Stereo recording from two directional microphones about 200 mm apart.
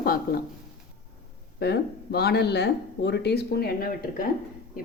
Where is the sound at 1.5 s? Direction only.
55° left (ahead or behind).